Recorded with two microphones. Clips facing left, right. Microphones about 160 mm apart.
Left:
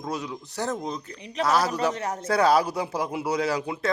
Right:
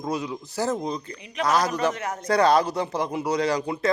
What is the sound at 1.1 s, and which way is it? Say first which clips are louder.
Speech: left 2 dB; 35° left (ahead or behind).